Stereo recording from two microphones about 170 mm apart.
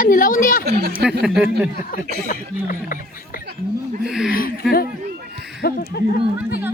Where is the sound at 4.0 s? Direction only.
5° right (ahead or behind).